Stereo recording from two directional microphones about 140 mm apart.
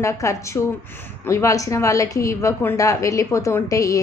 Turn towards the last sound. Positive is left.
turn(degrees=25)  # may be behind; listen again after turning